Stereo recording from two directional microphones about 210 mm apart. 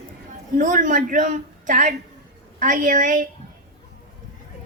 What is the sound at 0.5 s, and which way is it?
A woman's voice, 40° right (ahead or behind).